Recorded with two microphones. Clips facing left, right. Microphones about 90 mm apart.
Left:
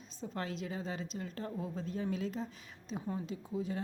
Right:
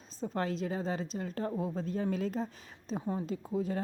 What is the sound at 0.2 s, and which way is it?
A woman's voice, 40° right (ahead or behind).